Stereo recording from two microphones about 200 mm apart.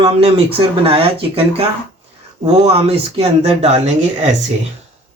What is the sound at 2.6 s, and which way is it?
Speech, 30° right (ahead or behind).